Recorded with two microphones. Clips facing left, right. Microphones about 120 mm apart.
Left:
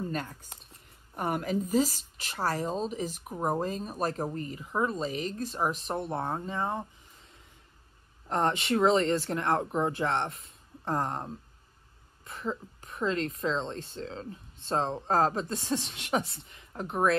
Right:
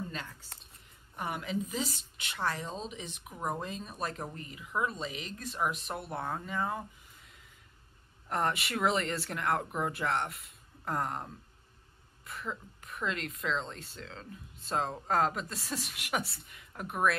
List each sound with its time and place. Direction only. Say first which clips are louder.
0.0 s a woman's voice: left 7 dB; 40° left (ahead or behind)